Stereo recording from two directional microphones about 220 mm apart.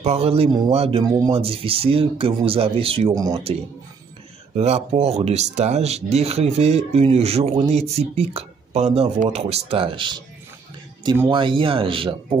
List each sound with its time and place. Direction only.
0.0 s speech: 25° right (ahead or behind)
4.6 s speech: 30° right (ahead or behind)